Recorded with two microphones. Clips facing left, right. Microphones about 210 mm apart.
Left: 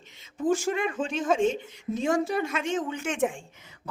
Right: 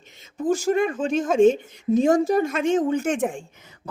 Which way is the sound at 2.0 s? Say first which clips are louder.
Right 7 dB; 40° right (ahead or behind).